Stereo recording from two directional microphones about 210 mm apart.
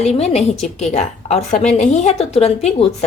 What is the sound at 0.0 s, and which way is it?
A woman's voice, 30° left (ahead or behind).